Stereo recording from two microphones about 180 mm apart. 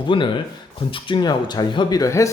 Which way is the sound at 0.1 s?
25° left (ahead or behind).